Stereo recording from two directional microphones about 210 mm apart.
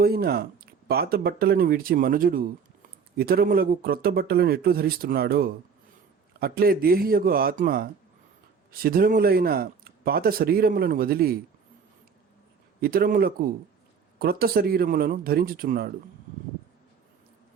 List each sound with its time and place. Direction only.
0.0 s speech: 45° right (ahead or behind)
12.8 s speech: 45° right (ahead or behind)